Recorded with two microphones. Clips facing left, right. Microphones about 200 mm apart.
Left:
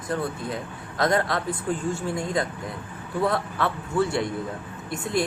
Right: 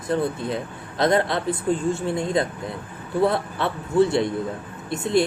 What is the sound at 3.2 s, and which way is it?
Speech, 25° right (ahead or behind).